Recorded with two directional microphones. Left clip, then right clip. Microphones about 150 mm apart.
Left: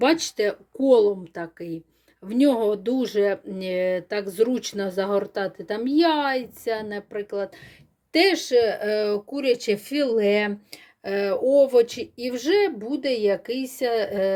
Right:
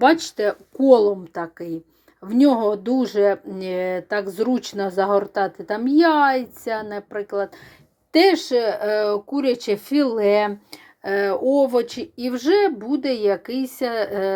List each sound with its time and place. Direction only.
0.0 s speech: 15° left (ahead or behind)
0.8 s speech: centre (ahead or behind)